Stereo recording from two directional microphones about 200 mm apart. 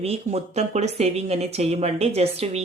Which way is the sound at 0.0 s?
30° right (ahead or behind).